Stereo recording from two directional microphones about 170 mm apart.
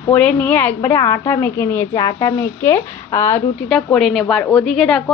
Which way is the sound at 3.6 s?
Centre (ahead or behind).